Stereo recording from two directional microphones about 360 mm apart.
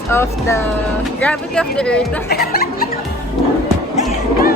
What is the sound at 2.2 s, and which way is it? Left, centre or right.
Speech, left.